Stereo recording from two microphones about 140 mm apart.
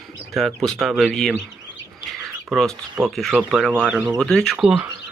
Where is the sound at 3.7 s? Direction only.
10° right (ahead or behind).